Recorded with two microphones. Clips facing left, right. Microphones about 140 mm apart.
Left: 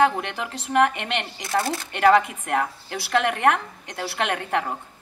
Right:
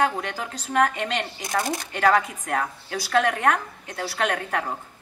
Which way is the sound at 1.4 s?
15° right (ahead or behind).